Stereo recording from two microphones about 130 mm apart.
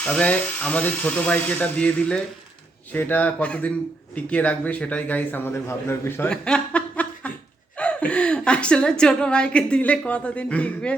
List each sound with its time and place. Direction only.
0.0 s speech: 10° left (ahead or behind)
6.3 s chuckle: 5° left (ahead or behind)
7.8 s a woman's voice: 10° left (ahead or behind)